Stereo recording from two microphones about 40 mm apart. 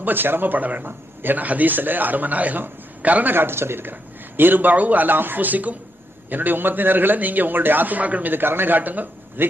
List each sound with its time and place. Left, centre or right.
0.0 s a man's voice: right
3.3 s a man's voice: right
4.4 s a man's voice: right
8.3 s a man's voice: right